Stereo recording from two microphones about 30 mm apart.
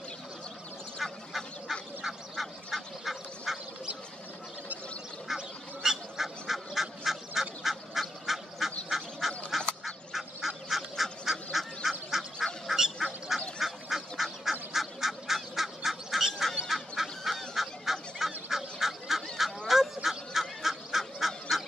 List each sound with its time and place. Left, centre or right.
1.0 s duck: centre
2.7 s duck: centre
5.3 s goose: centre
7.1 s duck: centre
9.5 s fowl: centre
11.0 s goose: centre
12.1 s fowl: centre
12.6 s duck: centre
16.6 s goose: centre
18.5 s fowl: centre
21.3 s goose: centre